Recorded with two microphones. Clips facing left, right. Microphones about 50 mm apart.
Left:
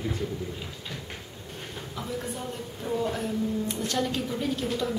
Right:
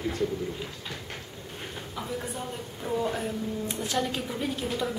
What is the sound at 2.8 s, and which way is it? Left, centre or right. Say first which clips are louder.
A woman's voice: even; centre.